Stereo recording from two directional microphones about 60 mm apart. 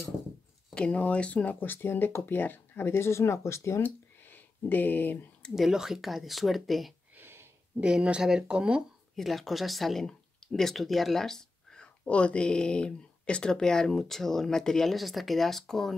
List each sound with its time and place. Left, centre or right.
0.7 s speech: centre; by 3.8 s left
3.8 s a sound: left
5.5 s speech: centre
7.2 s a sound: right
7.8 s speech: centre
9.1 s speech: centre